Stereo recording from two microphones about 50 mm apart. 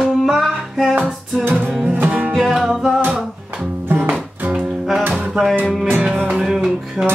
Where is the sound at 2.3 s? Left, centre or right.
Centre.